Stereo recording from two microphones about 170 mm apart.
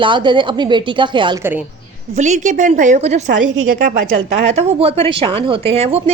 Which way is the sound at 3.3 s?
90° right.